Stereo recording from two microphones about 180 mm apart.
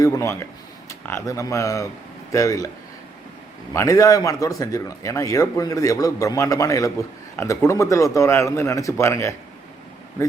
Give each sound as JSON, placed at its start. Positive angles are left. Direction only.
{"t": 0.0, "sound": "a man's voice", "side_deg": 15}
{"t": 3.7, "sound": "a man's voice", "side_deg": 20}